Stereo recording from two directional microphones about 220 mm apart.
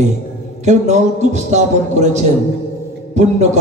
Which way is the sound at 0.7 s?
30° right (ahead or behind).